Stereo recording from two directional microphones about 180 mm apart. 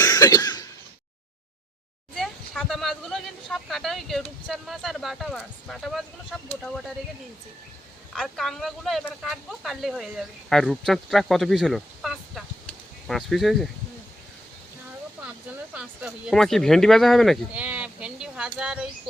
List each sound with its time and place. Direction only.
0.0 s cough: 20° left (ahead or behind)
2.1 s speech: centre (ahead or behind)
8.1 s speech: centre (ahead or behind)
15.7 s speech: 5° right (ahead or behind)